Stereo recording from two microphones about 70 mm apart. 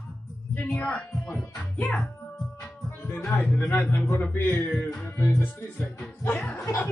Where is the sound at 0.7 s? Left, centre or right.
Centre.